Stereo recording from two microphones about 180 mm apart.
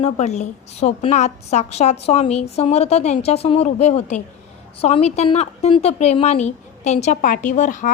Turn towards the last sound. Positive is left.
turn(degrees=45)  # may be behind; listen again after turning